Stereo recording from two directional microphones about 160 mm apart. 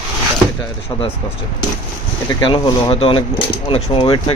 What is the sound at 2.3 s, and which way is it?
Speech, 30° left (ahead or behind).